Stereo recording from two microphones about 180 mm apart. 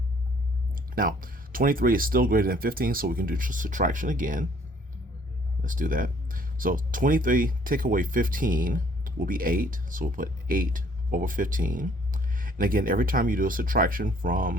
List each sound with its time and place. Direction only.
0.9 s speech: 50° right (ahead or behind)
5.6 s speech: 50° right (ahead or behind)